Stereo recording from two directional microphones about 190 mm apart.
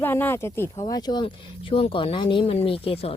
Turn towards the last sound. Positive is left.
turn(degrees=30)  # may be behind; listen again after turning